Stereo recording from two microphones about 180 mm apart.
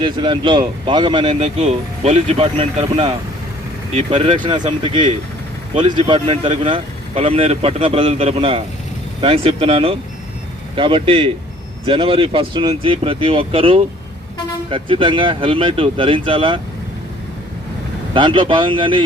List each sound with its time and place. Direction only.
0.0 s speech: 25° right (ahead or behind)
5.7 s speech: 30° right (ahead or behind)
18.1 s speech: 25° right (ahead or behind)